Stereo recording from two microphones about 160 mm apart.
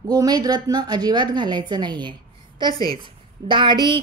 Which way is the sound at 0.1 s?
25° right (ahead or behind).